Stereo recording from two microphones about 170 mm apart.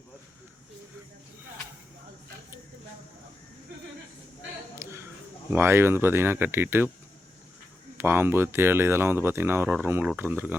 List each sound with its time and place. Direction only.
4.7 s a sound: 15° right (ahead or behind)
5.5 s speech: 15° right (ahead or behind)
7.9 s speech: 15° right (ahead or behind)